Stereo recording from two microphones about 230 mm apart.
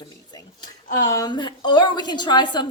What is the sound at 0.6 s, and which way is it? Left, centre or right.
A woman's voice, centre.